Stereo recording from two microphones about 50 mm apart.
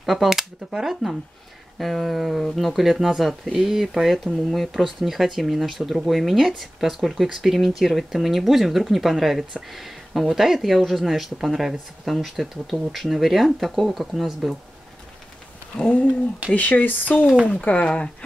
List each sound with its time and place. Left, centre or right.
0.0 s speech: centre
15.7 s speech: centre
16.5 s speech: left